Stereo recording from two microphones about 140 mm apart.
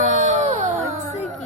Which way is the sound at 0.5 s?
60° right (ahead or behind).